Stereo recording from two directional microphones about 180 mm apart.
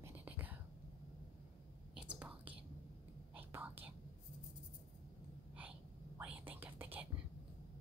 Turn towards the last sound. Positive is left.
turn(degrees=-10)  # may be behind; listen again after turning